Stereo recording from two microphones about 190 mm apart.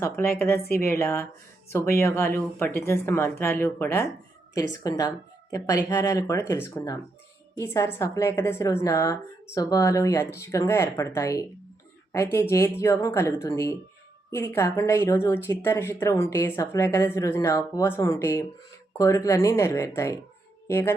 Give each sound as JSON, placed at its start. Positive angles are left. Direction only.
{"t": 0.0, "sound": "a woman's voice", "side_deg": 15}